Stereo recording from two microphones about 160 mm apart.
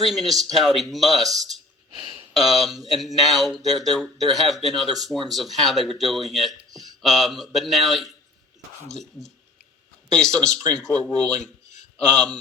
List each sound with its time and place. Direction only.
0.0 s speech: centre (ahead or behind)
2.0 s a sound: 30° right (ahead or behind)
2.4 s a man's voice: centre (ahead or behind)